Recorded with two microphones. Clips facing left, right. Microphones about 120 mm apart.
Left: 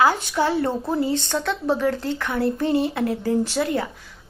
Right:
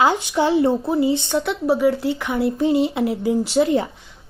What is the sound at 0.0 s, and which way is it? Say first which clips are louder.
A woman's voice: right 2 dB; 20° right (ahead or behind).